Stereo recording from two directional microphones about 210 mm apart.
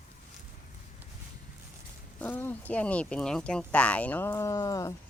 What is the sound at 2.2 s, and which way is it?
Speech, 10° left (ahead or behind).